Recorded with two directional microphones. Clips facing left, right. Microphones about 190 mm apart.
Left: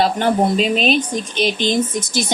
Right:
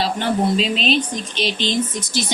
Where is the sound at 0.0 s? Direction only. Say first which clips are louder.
Left 4 dB; 50° left (ahead or behind).